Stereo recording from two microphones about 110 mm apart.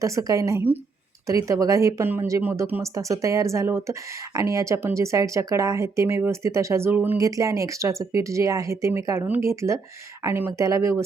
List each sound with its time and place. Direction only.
0.0 s speech: 30° right (ahead or behind)
2.8 s speech: 30° right (ahead or behind)
7.2 s speech: 30° right (ahead or behind)